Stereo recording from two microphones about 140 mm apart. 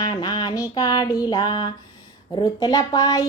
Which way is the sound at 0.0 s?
30° left (ahead or behind).